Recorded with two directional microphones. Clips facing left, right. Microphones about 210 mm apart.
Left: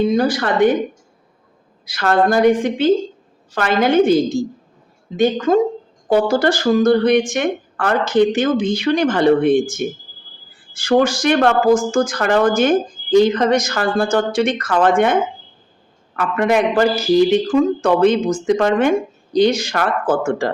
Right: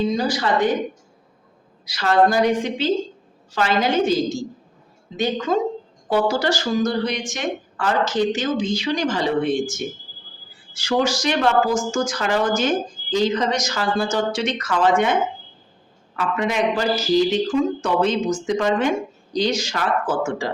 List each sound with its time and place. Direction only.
0.0 s speech: 55° left (ahead or behind)
1.8 s a woman's voice: 55° left (ahead or behind)